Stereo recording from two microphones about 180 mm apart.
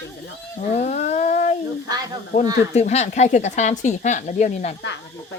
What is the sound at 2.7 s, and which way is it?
Speech, 40° left (ahead or behind).